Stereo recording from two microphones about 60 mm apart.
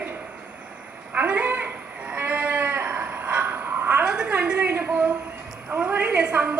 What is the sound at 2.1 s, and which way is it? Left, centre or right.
Sheep, right.